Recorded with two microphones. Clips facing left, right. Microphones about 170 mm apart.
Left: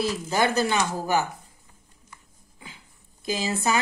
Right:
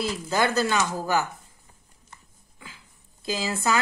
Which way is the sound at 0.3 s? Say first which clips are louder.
Even; 15° left (ahead or behind).